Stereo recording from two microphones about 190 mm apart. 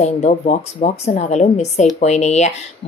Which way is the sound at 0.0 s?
35° left (ahead or behind).